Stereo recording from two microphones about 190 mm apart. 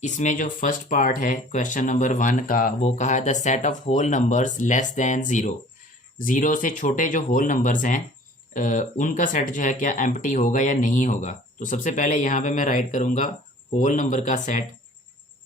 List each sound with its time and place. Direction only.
0.0 s speech: 40° left (ahead or behind)